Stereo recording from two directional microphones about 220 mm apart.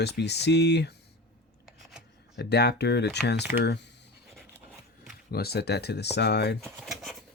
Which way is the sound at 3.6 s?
50° left (ahead or behind).